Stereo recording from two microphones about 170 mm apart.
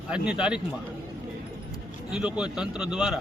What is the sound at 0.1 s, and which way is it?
Speech, 5° right (ahead or behind).